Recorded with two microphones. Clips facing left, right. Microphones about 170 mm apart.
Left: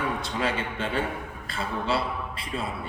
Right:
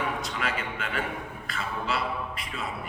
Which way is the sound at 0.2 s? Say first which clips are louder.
Left 3 dB; 30° left (ahead or behind).